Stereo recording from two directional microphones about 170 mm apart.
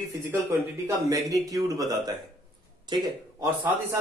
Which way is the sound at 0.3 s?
15° right (ahead or behind).